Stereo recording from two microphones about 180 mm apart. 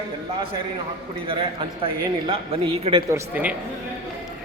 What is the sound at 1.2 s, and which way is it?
A man's voice, 30° right (ahead or behind).